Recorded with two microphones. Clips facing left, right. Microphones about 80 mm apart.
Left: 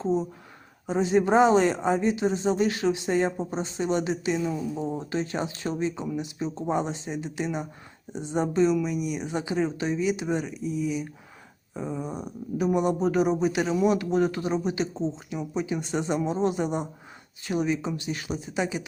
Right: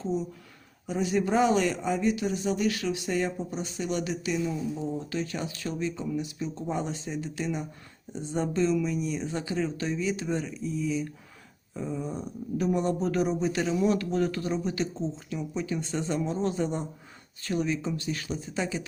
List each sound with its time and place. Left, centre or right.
0.9 s speech: left
5.1 s speech: left